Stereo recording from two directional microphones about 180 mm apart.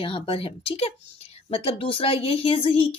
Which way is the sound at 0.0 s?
30° left (ahead or behind).